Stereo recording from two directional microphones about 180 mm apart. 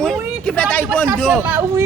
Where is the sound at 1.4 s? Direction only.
10° right (ahead or behind).